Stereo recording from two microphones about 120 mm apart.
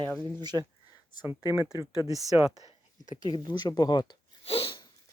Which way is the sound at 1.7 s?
25° right (ahead or behind).